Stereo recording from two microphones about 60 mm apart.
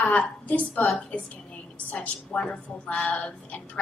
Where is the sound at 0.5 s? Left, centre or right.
Left.